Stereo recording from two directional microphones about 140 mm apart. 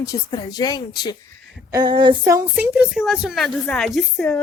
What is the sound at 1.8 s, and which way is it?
Female singing, 35° right (ahead or behind).